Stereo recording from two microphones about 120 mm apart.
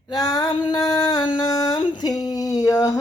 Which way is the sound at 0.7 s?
35° left (ahead or behind).